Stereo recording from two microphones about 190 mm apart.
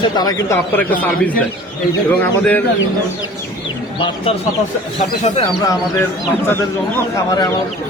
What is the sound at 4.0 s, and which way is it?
Speech, 25° left (ahead or behind).